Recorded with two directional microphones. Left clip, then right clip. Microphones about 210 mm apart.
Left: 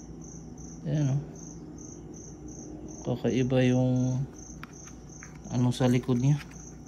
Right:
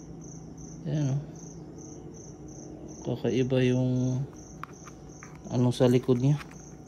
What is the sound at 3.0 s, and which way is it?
Speech, 10° right (ahead or behind).